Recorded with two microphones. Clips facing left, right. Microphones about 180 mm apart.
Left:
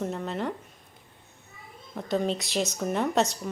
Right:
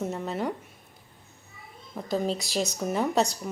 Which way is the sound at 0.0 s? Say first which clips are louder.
Right 1 dB; 5° right (ahead or behind).